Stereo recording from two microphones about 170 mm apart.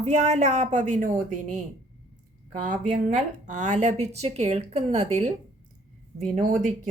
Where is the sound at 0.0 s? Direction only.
45° right (ahead or behind).